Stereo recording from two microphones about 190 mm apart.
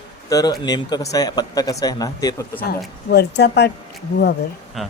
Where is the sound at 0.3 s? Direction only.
20° left (ahead or behind).